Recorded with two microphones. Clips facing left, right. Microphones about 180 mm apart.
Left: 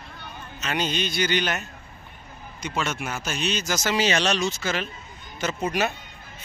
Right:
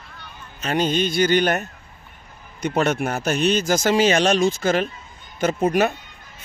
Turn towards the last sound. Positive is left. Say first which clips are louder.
# right 7 dB
turn(degrees=-55)  # may be behind; listen again after turning